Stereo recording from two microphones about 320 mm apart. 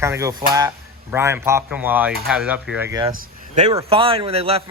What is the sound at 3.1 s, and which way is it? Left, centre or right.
Speech, right.